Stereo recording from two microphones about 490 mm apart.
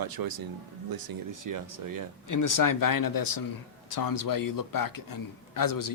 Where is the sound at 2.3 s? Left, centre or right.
Left.